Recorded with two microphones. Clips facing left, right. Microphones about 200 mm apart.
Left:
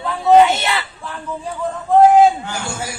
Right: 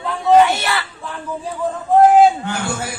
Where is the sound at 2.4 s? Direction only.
60° right (ahead or behind).